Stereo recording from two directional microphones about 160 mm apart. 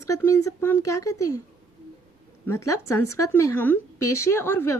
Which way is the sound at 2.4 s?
20° left (ahead or behind).